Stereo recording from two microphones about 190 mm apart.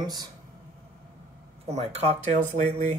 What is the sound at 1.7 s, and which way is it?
Speech, 35° right (ahead or behind).